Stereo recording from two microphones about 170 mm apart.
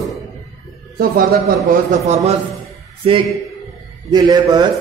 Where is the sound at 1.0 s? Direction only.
60° right (ahead or behind).